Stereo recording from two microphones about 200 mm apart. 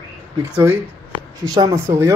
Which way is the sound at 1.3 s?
20° right (ahead or behind).